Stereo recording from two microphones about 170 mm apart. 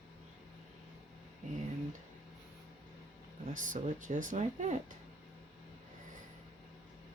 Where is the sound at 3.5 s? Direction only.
50° right (ahead or behind).